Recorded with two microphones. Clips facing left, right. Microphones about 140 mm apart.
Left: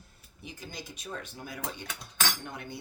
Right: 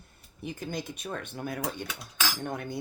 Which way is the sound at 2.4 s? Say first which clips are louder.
Right 7 dB; 45° right (ahead or behind).